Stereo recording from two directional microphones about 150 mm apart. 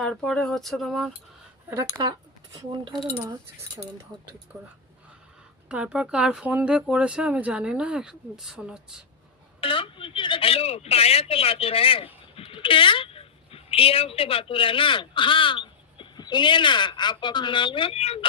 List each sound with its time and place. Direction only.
0.0 s speech: 5° left (ahead or behind)
1.7 s speech: 20° right (ahead or behind)
4.1 s speech: 30° right (ahead or behind)
5.6 s speech: 5° right (ahead or behind)
9.6 s a woman's voice: 35° left (ahead or behind)